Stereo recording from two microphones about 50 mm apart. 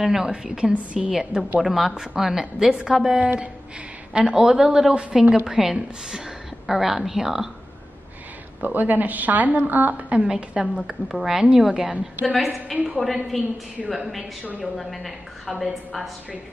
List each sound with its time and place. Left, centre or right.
0.0 s a woman's voice: centre
1.6 s a woman's voice: centre
8.6 s a woman's voice: right
10.3 s a woman's voice: centre